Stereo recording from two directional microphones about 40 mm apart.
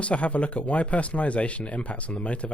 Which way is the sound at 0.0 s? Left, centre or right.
Left.